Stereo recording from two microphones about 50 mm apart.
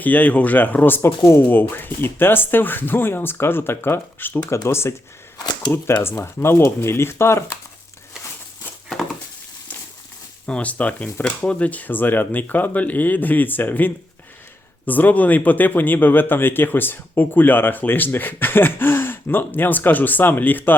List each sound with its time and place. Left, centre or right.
0.0 s speech: left
4.4 s speech: left
5.7 s speech: left
10.4 s speech: left